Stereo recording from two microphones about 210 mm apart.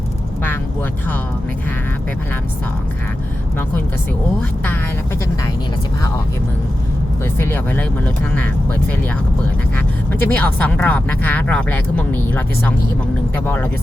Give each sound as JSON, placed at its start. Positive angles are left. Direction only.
{"t": 7.3, "sound": "speech", "side_deg": 10}
{"t": 9.7, "sound": "speech", "side_deg": 10}